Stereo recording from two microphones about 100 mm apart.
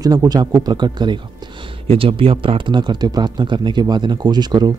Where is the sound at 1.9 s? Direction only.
65° right (ahead or behind); by 4.7 s 45° right (ahead or behind).